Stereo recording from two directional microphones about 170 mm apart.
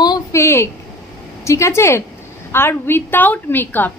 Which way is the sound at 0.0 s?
20° left (ahead or behind).